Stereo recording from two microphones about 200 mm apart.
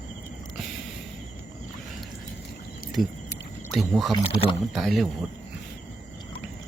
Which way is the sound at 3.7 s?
Centre (ahead or behind).